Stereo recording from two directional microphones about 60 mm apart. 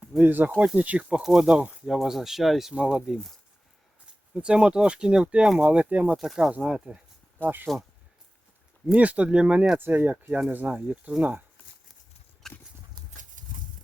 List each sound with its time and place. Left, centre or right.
0.2 s speech: right
0.6 s speech: right
1.1 s speech: centre
1.9 s speech: centre
2.7 s speech: centre
4.4 s speech: centre
6.1 s speech: centre
7.4 s speech: right
9.0 s speech: right
9.7 s speech: right
12.4 s clip-clop: centre